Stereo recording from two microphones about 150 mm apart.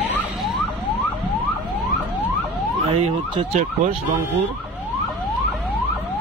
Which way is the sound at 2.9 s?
40° right (ahead or behind).